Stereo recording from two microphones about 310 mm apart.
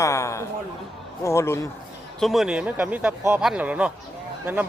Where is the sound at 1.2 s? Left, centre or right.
Centre.